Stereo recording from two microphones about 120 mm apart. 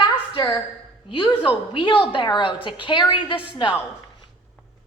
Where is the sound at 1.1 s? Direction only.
40° left (ahead or behind).